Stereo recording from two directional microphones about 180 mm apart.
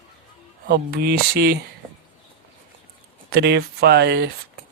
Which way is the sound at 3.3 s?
65° right (ahead or behind).